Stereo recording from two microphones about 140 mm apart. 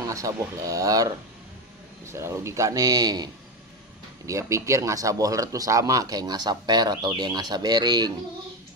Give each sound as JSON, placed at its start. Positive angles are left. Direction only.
{"t": 0.0, "sound": "speech", "side_deg": -20}
{"t": 4.3, "sound": "speech", "side_deg": -20}